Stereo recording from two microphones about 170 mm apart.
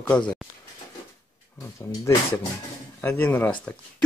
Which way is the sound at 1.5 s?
20° left (ahead or behind).